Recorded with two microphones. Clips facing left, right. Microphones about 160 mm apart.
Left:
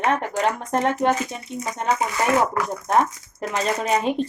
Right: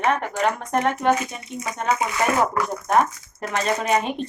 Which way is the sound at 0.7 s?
30° left (ahead or behind).